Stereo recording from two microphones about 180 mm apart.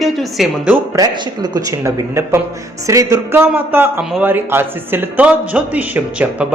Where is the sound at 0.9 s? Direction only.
20° right (ahead or behind).